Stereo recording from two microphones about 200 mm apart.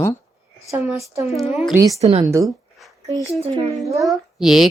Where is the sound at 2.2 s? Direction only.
15° right (ahead or behind).